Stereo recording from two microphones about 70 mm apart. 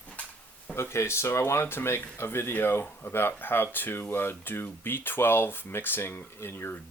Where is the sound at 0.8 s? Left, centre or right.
Left.